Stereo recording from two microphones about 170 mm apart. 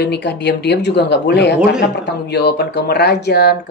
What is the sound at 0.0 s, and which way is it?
Speech, 80° left.